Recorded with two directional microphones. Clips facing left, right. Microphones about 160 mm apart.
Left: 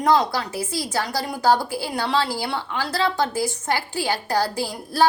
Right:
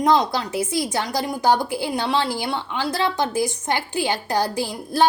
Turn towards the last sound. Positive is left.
turn(degrees=-20)  # may be behind; listen again after turning